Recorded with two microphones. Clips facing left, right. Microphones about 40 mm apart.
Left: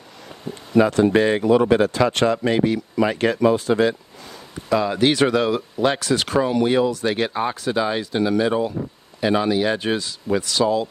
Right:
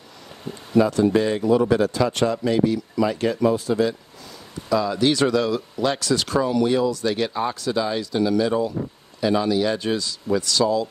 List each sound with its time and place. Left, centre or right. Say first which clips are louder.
0.7 s speech: left 2 dB; left
4.6 s speech: left 2 dB; left